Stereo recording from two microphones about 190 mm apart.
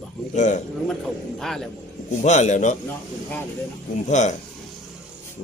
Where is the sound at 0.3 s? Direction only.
40° left (ahead or behind).